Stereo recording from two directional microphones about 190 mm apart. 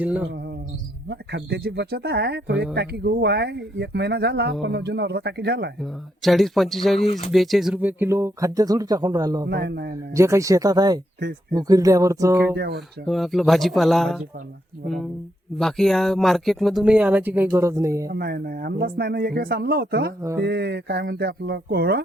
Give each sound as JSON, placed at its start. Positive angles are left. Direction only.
{"t": 0.0, "sound": "music", "side_deg": -10}
{"t": 1.0, "sound": "speech", "side_deg": -55}
{"t": 5.8, "sound": "speech", "side_deg": 0}
{"t": 9.5, "sound": "speech", "side_deg": -60}
{"t": 10.2, "sound": "speech", "side_deg": -15}
{"t": 12.5, "sound": "speech", "side_deg": -60}
{"t": 13.1, "sound": "speech", "side_deg": 0}
{"t": 15.5, "sound": "speech", "side_deg": 0}
{"t": 18.1, "sound": "speech", "side_deg": -55}